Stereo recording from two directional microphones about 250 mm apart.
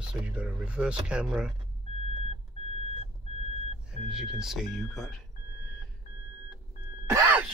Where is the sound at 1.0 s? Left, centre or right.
Centre.